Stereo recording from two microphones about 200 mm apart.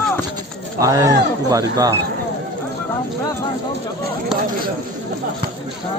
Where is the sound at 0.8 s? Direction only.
15° right (ahead or behind).